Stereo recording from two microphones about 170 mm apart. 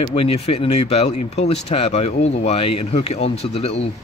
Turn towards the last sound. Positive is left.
turn(degrees=40)  # may be behind; listen again after turning